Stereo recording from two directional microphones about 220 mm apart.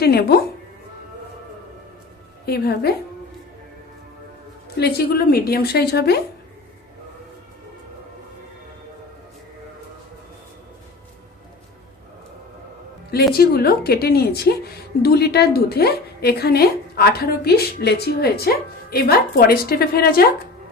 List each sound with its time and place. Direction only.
0.0 s speech: 45° left (ahead or behind)
2.5 s a woman's voice: 45° left (ahead or behind)
4.8 s a woman's voice: 45° left (ahead or behind)
13.3 s a woman's voice: 45° left (ahead or behind)